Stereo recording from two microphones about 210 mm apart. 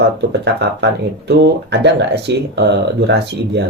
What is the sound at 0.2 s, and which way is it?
Speech, 55° right (ahead or behind).